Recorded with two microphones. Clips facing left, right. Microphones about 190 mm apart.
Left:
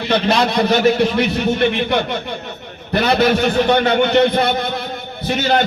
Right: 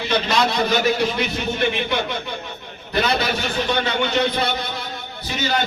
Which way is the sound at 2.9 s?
60° left (ahead or behind).